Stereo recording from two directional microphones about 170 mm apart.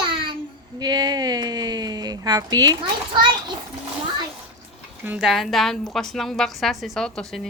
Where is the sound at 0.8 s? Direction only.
25° right (ahead or behind).